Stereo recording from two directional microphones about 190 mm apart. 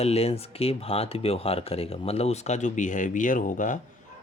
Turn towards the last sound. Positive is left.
turn(degrees=40)  # may be behind; listen again after turning